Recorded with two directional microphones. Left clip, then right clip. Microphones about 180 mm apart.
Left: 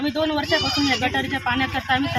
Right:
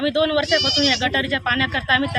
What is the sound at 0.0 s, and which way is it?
Speech, 15° right (ahead or behind).